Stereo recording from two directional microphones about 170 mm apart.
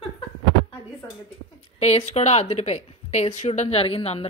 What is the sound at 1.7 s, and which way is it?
Speech, 40° left (ahead or behind).